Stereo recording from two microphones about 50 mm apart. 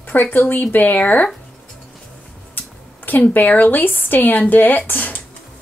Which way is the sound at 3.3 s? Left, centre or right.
Left.